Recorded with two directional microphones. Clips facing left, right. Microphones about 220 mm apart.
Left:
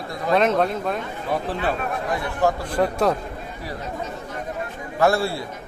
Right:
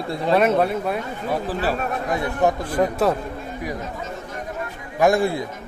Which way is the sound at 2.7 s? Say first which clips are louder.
Right 1 dB; 5° right (ahead or behind).